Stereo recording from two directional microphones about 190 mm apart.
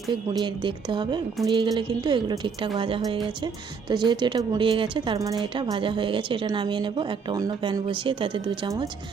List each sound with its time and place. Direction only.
0.3 s a woman's voice: 25° right (ahead or behind)